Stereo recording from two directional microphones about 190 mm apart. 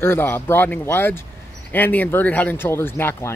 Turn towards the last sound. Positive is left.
turn(degrees=10)  # may be behind; listen again after turning